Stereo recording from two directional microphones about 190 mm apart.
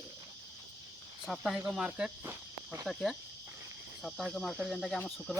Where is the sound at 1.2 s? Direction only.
Centre (ahead or behind).